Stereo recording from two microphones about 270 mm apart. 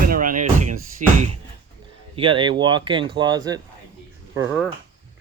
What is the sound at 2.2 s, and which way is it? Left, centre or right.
Speech, centre.